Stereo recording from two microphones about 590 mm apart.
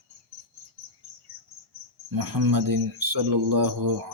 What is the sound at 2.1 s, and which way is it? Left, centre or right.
Mantra, right.